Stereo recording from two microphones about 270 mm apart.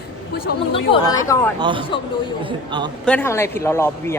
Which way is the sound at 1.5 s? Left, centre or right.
Centre.